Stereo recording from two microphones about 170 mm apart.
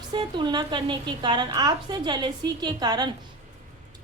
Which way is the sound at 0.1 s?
25° right (ahead or behind).